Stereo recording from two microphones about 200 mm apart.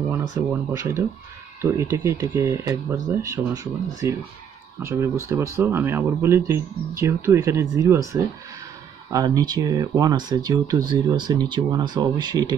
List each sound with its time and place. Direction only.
0.1 s speech: 15° right (ahead or behind)